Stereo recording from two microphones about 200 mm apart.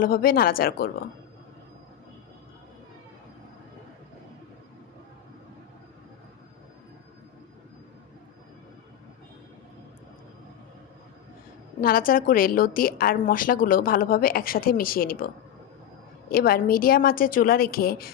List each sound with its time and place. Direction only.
0.0 s a woman's voice: 45° left (ahead or behind)
11.8 s a woman's voice: 45° left (ahead or behind)